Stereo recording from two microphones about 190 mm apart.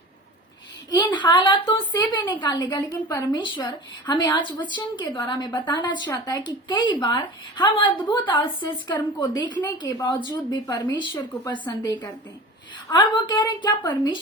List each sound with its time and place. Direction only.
0.9 s a woman's voice: 20° left (ahead or behind)